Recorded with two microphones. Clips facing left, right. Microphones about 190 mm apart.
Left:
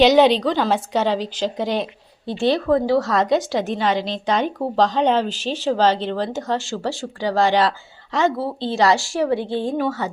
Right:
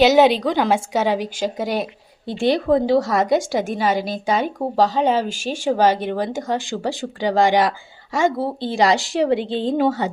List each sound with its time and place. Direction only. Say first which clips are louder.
0.0 s a woman's voice: even; 10° right (ahead or behind)